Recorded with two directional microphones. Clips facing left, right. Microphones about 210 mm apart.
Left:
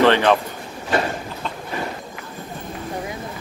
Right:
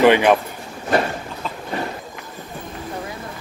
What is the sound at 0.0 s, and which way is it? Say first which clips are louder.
Speech: right 2 dB; 15° right (ahead or behind).